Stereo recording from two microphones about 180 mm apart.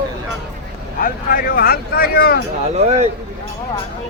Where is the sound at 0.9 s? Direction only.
50° left (ahead or behind).